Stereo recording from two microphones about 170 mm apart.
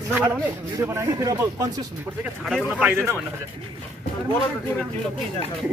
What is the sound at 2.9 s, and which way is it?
Speech, 15° right (ahead or behind).